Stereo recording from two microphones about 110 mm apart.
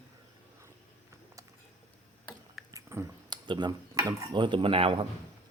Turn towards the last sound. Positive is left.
turn(degrees=-60)  # may be behind; listen again after turning